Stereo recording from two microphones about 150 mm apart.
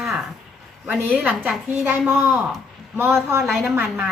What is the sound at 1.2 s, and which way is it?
A woman's voice, 10° right (ahead or behind).